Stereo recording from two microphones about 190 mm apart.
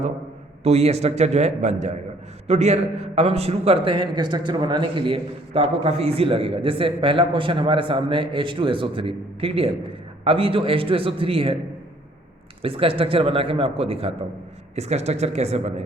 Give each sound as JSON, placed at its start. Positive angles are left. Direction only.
{"t": 0.6, "sound": "a man's voice", "side_deg": -35}
{"t": 12.6, "sound": "a man's voice", "side_deg": -30}